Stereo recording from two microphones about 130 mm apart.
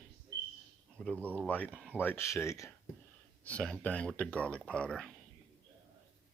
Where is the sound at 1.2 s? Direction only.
15° right (ahead or behind).